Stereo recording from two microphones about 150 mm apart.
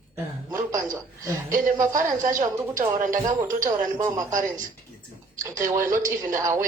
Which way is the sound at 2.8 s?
60° right (ahead or behind).